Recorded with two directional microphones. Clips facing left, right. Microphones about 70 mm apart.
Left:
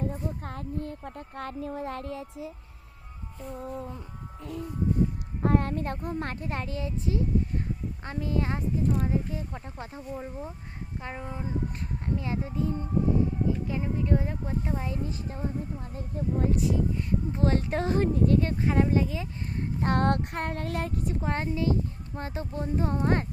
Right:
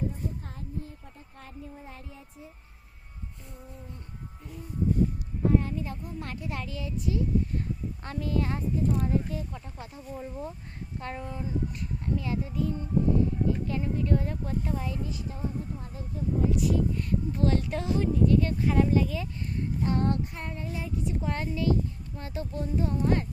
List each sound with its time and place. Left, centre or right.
0.1 s speech: left
3.6 s a sound: left
5.4 s a woman's voice: left
13.7 s a woman's voice: centre
16.0 s speech: left
16.6 s speech: left
19.8 s speech: left